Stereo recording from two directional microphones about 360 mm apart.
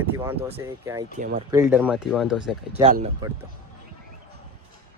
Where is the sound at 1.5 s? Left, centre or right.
Centre.